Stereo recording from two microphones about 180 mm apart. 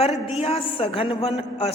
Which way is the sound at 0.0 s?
30° left (ahead or behind).